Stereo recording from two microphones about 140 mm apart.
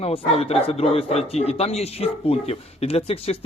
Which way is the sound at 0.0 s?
45° left (ahead or behind).